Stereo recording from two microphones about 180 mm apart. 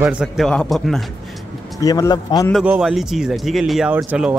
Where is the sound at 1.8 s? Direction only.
20° left (ahead or behind).